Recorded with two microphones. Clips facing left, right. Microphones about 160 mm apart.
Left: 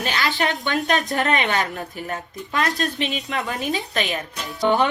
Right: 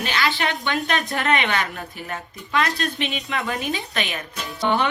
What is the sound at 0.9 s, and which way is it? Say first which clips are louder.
A woman's voice: left 2 dB; 40° left (ahead or behind).